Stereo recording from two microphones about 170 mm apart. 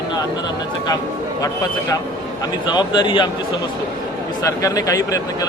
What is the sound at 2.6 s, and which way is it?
Speech, 25° left (ahead or behind).